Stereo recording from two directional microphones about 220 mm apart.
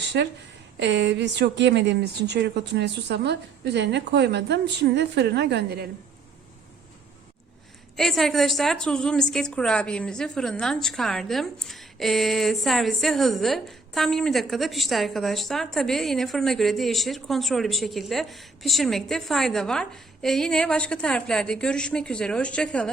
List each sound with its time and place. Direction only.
0.1 s a woman's voice: 50° right (ahead or behind)
7.9 s a woman's voice: centre (ahead or behind)